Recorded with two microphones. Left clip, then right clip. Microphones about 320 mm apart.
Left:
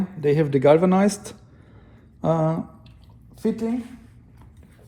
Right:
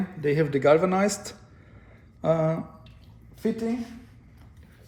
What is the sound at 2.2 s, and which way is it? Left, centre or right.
Speech, centre.